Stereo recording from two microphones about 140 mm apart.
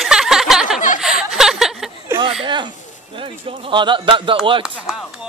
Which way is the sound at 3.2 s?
40° right (ahead or behind).